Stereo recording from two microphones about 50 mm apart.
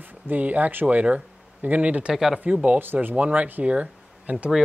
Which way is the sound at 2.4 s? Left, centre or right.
Right.